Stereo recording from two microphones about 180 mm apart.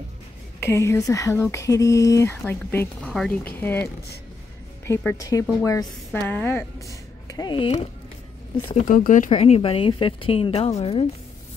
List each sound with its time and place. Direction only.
0.6 s a woman's voice: 15° left (ahead or behind); by 7.8 s 30° left (ahead or behind)
8.8 s speech: 50° left (ahead or behind)
9.4 s a woman's voice: 30° left (ahead or behind)